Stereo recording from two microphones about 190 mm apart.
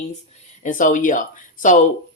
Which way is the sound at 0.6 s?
45° left (ahead or behind).